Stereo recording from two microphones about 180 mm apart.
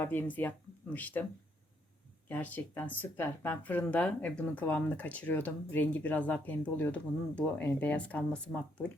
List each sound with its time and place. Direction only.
0.0 s speech: 10° left (ahead or behind)
2.3 s speech: 10° left (ahead or behind)